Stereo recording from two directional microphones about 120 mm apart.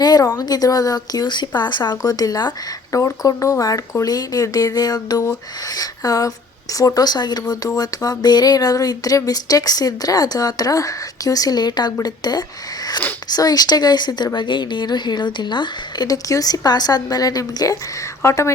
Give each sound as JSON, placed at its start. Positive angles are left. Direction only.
{"t": 0.0, "sound": "speech", "side_deg": 30}